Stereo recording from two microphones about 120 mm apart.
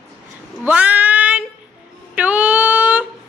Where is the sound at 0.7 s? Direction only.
15° right (ahead or behind).